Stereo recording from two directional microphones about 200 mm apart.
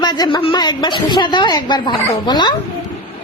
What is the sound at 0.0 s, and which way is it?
A woman's voice, 20° left (ahead or behind).